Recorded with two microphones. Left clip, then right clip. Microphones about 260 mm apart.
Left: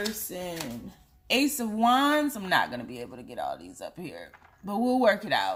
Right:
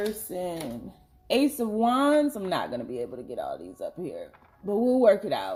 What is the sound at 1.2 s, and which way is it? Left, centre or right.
Speech, left.